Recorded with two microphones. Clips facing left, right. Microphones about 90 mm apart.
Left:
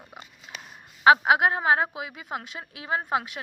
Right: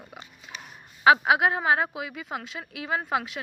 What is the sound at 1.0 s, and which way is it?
A woman's voice, 35° left (ahead or behind).